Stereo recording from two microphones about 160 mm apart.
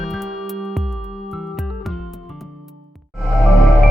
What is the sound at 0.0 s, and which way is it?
Music, centre (ahead or behind).